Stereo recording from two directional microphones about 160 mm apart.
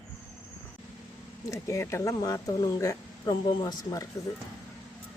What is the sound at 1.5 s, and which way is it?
Speech, 20° left (ahead or behind).